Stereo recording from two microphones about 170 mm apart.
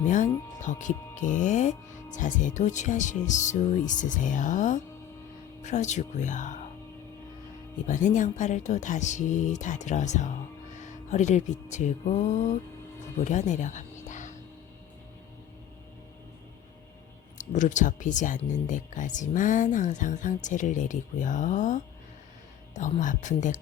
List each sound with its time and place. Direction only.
0.0 s speech: 45° left (ahead or behind)
7.9 s speech: 45° left (ahead or behind)
13.2 s music: 45° left (ahead or behind)
17.3 s speech: 45° left (ahead or behind)